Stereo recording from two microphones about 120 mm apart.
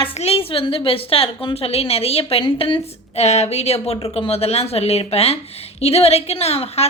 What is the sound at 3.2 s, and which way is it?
A woman's voice, 65° left (ahead or behind).